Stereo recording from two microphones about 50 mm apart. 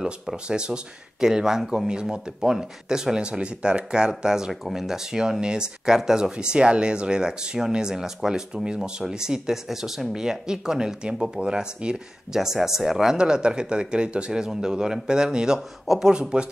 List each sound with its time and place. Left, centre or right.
0.0 s speech: centre